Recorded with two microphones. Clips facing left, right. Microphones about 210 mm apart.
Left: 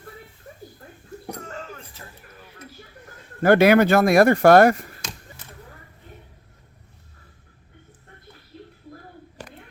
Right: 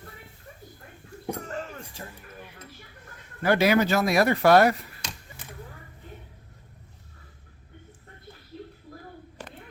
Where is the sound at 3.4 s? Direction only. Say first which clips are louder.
Left 6 dB; 55° left (ahead or behind).